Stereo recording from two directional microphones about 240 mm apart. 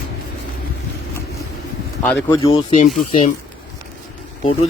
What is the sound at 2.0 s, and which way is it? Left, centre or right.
Speech, centre.